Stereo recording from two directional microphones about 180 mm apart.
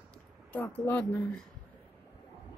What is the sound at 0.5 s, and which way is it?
Speech, 10° left (ahead or behind).